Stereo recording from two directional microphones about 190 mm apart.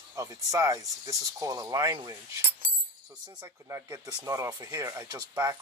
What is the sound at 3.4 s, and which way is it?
Speech, 15° right (ahead or behind).